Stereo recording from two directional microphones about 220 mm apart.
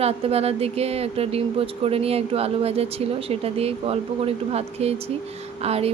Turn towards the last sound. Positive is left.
turn(degrees=-25)  # may be behind; listen again after turning